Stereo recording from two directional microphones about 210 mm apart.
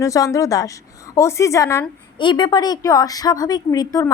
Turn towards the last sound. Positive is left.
turn(degrees=15)  # may be behind; listen again after turning